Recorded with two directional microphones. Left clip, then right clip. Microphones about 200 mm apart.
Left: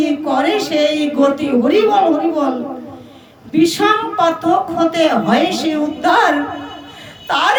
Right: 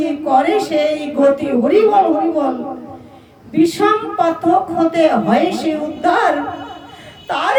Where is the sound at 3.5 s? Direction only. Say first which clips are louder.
Left 1 dB; 10° right (ahead or behind).